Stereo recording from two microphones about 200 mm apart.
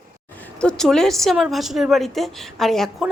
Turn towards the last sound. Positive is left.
turn(degrees=0)  # may be behind; listen again after turning